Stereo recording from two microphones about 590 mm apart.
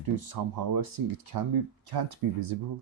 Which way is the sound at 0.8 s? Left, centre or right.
Right.